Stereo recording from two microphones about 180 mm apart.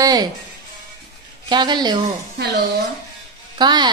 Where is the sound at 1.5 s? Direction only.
25° right (ahead or behind).